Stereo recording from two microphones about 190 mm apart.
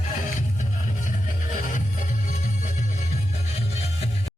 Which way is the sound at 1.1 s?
40° left (ahead or behind).